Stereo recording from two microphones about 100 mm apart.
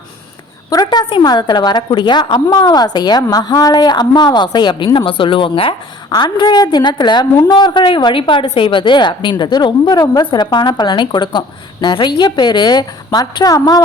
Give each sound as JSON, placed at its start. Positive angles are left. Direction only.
{"t": 0.9, "sound": "a woman's voice", "side_deg": 50}
{"t": 6.1, "sound": "a woman's voice", "side_deg": 45}